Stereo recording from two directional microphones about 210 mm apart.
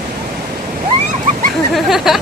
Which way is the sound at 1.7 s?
Centre (ahead or behind).